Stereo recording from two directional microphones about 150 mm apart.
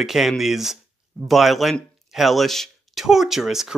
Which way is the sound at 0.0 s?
Centre (ahead or behind).